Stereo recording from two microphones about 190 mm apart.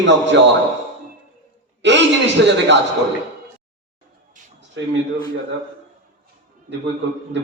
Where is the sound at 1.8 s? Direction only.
70° right (ahead or behind).